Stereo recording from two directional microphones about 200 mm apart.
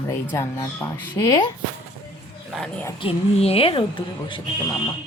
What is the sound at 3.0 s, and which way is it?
Speech, 30° left (ahead or behind).